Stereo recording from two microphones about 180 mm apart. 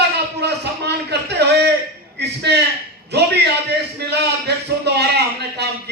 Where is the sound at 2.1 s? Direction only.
70° right (ahead or behind).